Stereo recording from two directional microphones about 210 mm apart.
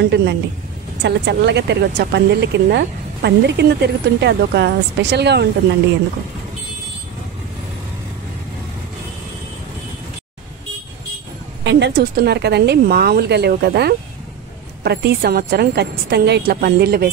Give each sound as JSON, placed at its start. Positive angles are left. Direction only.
{"t": 0.0, "sound": "speech", "side_deg": -55}
{"t": 11.6, "sound": "speech", "side_deg": -55}